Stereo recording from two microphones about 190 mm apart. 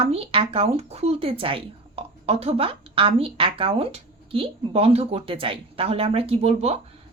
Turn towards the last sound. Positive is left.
turn(degrees=-35)  # may be behind; listen again after turning